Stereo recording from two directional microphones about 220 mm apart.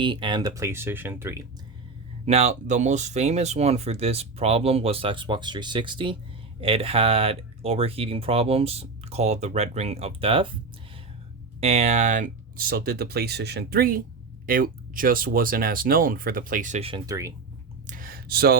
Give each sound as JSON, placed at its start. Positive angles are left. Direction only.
{"t": 0.0, "sound": "speech", "side_deg": -20}
{"t": 2.2, "sound": "speech", "side_deg": -30}
{"t": 11.6, "sound": "speech", "side_deg": -30}
{"t": 17.8, "sound": "a sound", "side_deg": -40}